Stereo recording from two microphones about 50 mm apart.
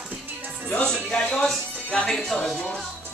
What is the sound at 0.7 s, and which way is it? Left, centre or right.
Music, centre.